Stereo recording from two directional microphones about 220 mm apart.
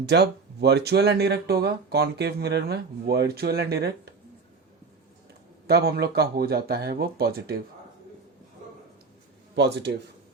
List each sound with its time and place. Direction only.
0.0 s speech: 50° right (ahead or behind)
5.6 s speech: 45° right (ahead or behind)
9.6 s speech: 50° right (ahead or behind)